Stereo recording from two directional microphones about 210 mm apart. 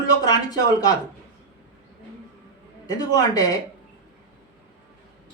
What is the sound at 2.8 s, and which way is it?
Speech, 20° left (ahead or behind).